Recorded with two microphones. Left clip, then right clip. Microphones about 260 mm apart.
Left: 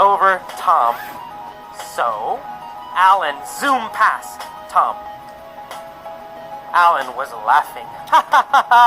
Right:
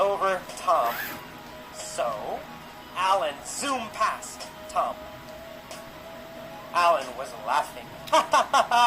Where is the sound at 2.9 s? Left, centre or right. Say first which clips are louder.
Left 11 dB; left.